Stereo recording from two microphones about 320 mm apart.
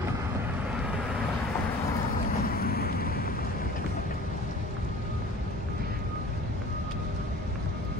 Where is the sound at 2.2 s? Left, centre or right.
Left.